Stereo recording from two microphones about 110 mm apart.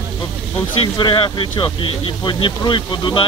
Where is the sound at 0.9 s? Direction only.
45° left (ahead or behind).